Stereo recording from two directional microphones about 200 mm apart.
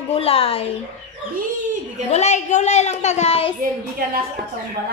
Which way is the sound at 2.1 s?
35° left (ahead or behind).